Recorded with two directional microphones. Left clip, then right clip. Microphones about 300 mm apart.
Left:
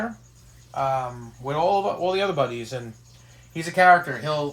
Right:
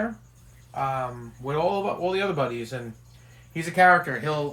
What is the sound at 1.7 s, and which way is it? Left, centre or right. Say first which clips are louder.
Speech: left 4 dB; centre.